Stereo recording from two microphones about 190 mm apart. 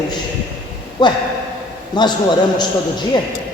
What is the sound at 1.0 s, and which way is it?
Speech, 25° left (ahead or behind).